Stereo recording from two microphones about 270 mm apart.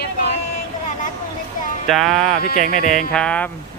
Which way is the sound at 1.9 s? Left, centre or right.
Centre.